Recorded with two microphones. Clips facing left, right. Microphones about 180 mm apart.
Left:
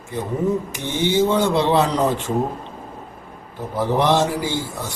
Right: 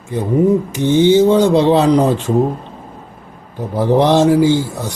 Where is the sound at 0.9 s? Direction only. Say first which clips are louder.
Right 9 dB; 20° right (ahead or behind).